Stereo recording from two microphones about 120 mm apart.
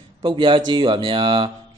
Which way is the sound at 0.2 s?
45° right (ahead or behind).